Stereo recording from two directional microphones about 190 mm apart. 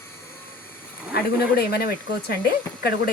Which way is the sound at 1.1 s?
55° left (ahead or behind).